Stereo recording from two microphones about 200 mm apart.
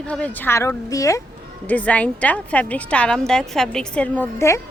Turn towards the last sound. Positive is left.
turn(degrees=15)  # may be behind; listen again after turning